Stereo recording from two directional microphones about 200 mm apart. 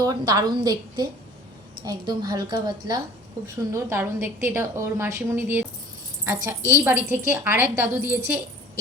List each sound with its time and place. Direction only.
0.0 s a woman's voice: 15° right (ahead or behind)